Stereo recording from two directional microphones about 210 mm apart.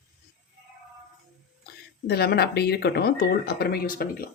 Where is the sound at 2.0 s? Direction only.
50° left (ahead or behind).